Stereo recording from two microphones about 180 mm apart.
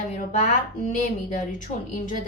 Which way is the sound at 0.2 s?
40° left (ahead or behind).